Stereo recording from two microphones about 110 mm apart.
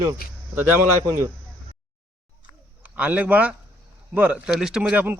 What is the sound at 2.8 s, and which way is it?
Speech, 15° right (ahead or behind).